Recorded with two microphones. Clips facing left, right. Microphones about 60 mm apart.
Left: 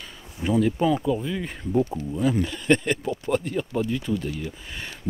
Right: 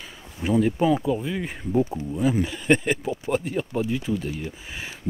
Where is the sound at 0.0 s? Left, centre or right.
Centre.